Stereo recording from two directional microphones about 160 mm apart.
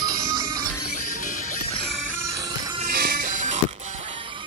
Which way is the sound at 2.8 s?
60° right (ahead or behind).